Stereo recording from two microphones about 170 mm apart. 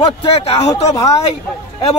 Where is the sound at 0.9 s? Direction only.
20° left (ahead or behind).